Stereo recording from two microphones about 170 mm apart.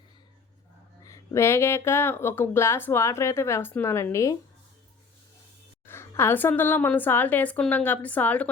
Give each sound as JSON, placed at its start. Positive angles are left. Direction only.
{"t": 1.0, "sound": "speech", "side_deg": 20}
{"t": 5.8, "sound": "speech", "side_deg": 15}